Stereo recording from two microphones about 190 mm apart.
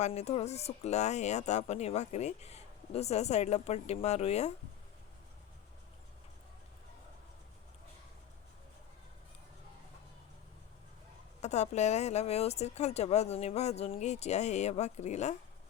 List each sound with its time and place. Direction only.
0.0 s speech: 35° left (ahead or behind)
11.4 s speech: 35° left (ahead or behind)